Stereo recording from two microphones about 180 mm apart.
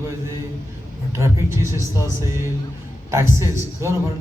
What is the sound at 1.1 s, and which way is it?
A man's voice, 15° right (ahead or behind).